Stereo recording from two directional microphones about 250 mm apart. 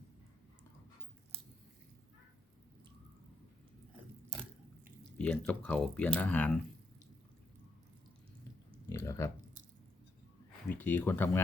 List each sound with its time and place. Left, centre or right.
5.1 s speech: centre
8.9 s a sound: centre
10.7 s speech: centre